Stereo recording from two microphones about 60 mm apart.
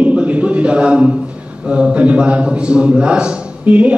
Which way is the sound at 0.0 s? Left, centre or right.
Right.